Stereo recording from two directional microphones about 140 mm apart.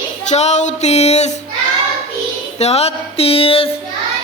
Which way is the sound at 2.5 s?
50° left (ahead or behind).